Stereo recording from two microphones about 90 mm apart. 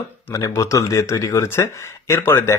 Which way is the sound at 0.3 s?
35° left (ahead or behind).